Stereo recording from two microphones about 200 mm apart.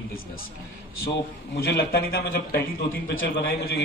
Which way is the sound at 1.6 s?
50° left (ahead or behind).